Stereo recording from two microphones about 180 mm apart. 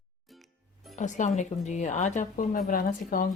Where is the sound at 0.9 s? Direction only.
40° left (ahead or behind).